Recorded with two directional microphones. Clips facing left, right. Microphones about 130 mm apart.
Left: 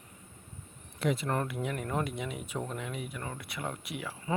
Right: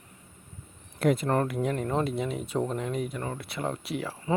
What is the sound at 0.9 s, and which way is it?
Speech, 45° right (ahead or behind).